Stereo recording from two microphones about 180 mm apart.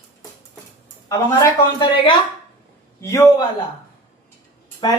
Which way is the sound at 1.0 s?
25° left (ahead or behind).